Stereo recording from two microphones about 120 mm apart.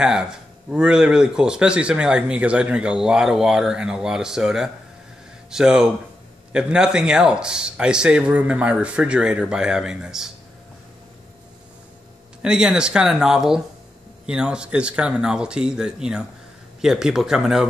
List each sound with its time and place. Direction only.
0.0 s speech: 5° right (ahead or behind)
12.4 s speech: 5° right (ahead or behind)